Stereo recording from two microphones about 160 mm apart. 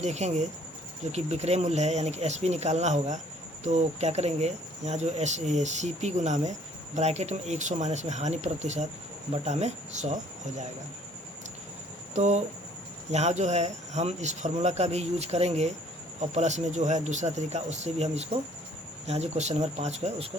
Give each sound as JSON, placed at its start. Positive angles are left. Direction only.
{"t": 0.0, "sound": "speech", "side_deg": -45}
{"t": 12.1, "sound": "speech", "side_deg": -45}